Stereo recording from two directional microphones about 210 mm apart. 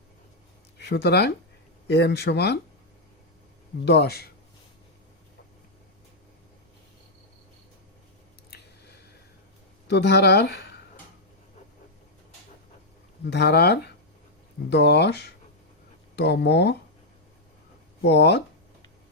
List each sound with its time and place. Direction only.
0.8 s speech: 55° left (ahead or behind)
3.8 s speech: 50° left (ahead or behind)
8.4 s chewing: 50° left (ahead or behind)
9.8 s speech: 55° left (ahead or behind)
13.2 s speech: 50° left (ahead or behind)
18.0 s speech: 55° left (ahead or behind)